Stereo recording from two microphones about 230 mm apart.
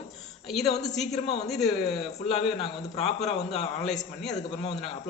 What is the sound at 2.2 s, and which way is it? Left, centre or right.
A man's voice, left.